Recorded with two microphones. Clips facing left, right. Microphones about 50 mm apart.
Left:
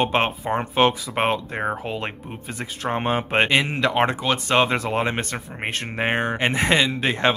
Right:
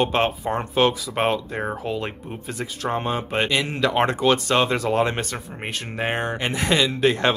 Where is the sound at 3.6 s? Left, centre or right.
Centre.